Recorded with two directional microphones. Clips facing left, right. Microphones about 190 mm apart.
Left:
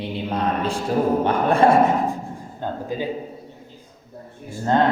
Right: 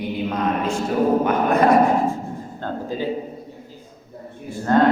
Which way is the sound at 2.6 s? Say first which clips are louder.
Even; 15° left (ahead or behind).